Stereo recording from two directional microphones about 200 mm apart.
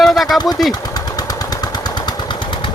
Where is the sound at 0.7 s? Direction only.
20° left (ahead or behind).